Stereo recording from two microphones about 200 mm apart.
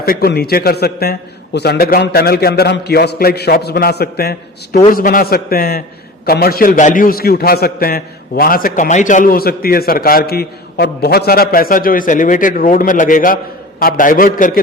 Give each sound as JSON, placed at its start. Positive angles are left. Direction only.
{"t": 0.0, "sound": "a man's voice", "side_deg": 50}